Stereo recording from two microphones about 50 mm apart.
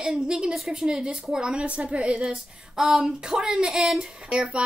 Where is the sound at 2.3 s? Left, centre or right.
Centre.